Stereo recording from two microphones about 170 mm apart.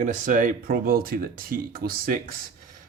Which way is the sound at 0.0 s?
50° right (ahead or behind).